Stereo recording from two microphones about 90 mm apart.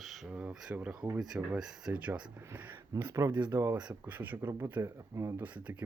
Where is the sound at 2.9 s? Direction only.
35° right (ahead or behind).